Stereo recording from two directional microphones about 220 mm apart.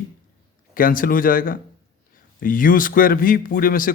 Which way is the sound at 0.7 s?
40° left (ahead or behind).